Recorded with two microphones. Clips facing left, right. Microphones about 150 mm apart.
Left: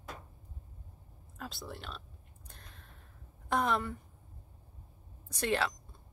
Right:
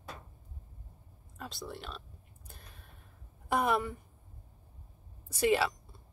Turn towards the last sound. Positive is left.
turn(degrees=-5)  # may be behind; listen again after turning